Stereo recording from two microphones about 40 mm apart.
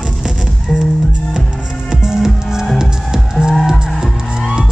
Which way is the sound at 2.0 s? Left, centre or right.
Centre.